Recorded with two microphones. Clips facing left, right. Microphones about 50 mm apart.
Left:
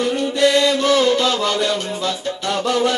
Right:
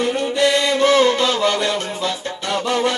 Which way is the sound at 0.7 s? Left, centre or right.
Right.